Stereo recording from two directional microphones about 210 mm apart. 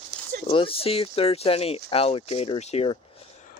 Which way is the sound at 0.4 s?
25° left (ahead or behind).